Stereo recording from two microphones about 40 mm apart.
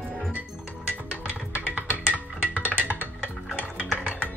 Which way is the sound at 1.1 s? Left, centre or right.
Right.